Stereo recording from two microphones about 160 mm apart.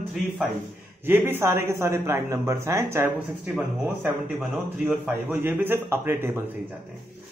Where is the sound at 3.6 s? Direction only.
5° right (ahead or behind).